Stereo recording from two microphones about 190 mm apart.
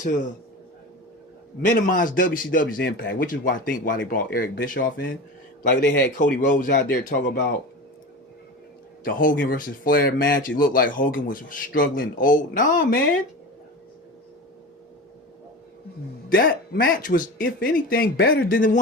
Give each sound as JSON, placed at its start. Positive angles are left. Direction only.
{"t": 1.6, "sound": "speech", "side_deg": 45}
{"t": 2.7, "sound": "speech", "side_deg": 70}
{"t": 3.2, "sound": "speech", "side_deg": 45}
{"t": 6.4, "sound": "speech", "side_deg": 45}
{"t": 6.7, "sound": "speech", "side_deg": 55}
{"t": 9.0, "sound": "speech", "side_deg": 45}
{"t": 16.4, "sound": "speech", "side_deg": 50}